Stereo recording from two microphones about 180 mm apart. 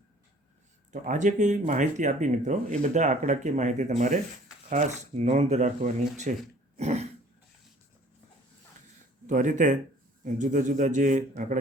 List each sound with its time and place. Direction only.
1.0 s a man's voice: 45° right (ahead or behind)
9.2 s a man's voice: 45° right (ahead or behind)